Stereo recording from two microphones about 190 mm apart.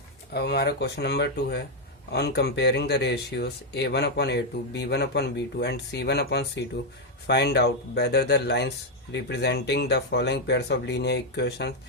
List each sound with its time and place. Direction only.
0.3 s speech: 60° left (ahead or behind)